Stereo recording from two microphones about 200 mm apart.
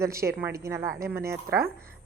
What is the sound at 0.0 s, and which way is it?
A woman's voice, 15° right (ahead or behind).